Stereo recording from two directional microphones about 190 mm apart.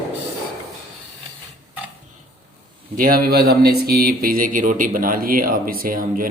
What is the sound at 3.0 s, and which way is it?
Speech, 50° right (ahead or behind).